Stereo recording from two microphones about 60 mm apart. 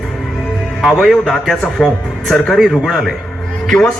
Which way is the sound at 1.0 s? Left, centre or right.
Centre.